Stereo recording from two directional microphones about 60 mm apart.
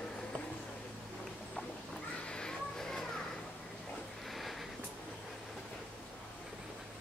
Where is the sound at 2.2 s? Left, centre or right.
Centre.